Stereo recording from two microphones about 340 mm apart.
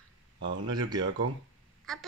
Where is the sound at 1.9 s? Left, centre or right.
Centre.